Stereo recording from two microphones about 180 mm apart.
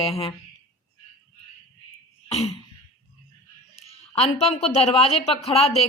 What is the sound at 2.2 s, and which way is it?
Throat clearing, 35° left (ahead or behind).